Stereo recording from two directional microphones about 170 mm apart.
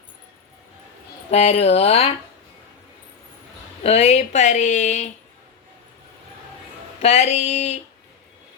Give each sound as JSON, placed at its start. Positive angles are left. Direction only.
{"t": 1.3, "sound": "speech", "side_deg": 40}
{"t": 3.8, "sound": "speech", "side_deg": 40}
{"t": 7.0, "sound": "speech", "side_deg": 40}